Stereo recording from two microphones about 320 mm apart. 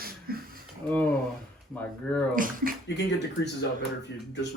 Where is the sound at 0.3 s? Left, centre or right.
Right.